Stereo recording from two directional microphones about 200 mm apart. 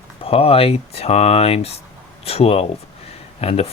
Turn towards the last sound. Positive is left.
turn(degrees=30)  # may be behind; listen again after turning